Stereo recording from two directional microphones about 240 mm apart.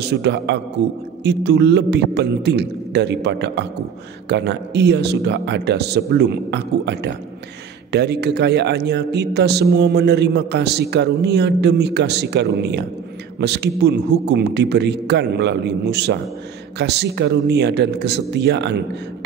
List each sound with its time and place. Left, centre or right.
0.0 s a man's voice: right